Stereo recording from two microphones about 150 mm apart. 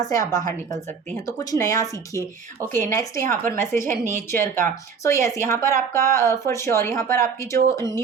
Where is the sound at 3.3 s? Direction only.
15° left (ahead or behind).